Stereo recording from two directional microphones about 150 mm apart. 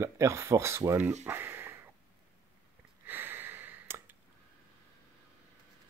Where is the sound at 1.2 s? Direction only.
15° right (ahead or behind).